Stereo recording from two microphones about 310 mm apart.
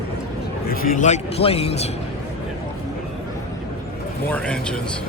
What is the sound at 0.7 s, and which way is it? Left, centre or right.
A man's voice, left.